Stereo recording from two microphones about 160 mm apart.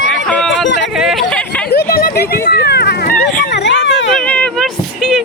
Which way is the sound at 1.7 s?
80° left.